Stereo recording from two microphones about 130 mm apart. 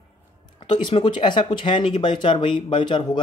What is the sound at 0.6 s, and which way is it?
Speech, 40° left (ahead or behind).